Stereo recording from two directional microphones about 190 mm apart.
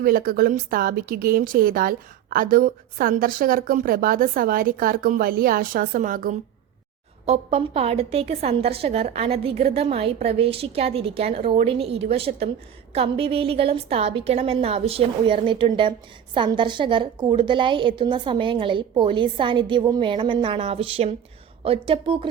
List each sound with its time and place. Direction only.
0.0 s speech: 50° right (ahead or behind)
7.3 s a woman's voice: 30° right (ahead or behind)